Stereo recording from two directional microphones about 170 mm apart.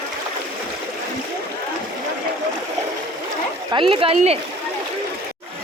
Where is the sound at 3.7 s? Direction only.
30° right (ahead or behind).